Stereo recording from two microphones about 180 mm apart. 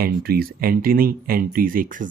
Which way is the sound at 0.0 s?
55° right (ahead or behind).